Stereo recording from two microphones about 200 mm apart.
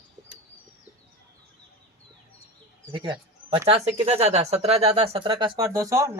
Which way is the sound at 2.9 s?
20° right (ahead or behind).